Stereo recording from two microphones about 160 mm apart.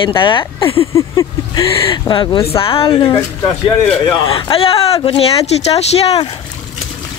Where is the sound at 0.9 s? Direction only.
20° left (ahead or behind).